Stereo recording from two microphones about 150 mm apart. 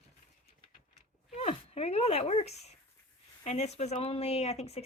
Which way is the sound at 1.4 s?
40° left (ahead or behind).